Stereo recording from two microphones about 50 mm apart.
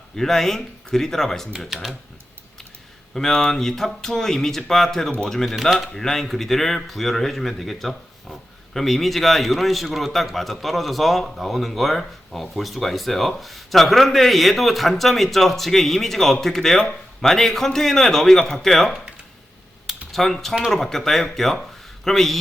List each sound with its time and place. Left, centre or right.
0.2 s speech: centre
1.7 s speech: centre
3.2 s a man's voice: centre
19.9 s typing: centre
20.7 s a man's voice: centre